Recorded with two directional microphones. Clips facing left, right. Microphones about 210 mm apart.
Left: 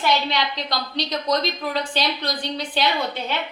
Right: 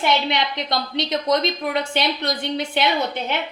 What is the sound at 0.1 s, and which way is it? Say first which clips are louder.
A woman's voice: right 1 dB; 20° right (ahead or behind).